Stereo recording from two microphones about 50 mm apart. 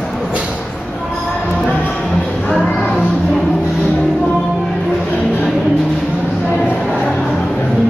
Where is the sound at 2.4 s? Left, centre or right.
Left.